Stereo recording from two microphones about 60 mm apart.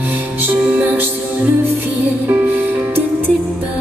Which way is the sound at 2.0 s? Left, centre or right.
Right.